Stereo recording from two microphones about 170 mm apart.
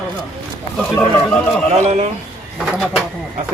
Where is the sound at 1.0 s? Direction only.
5° left (ahead or behind).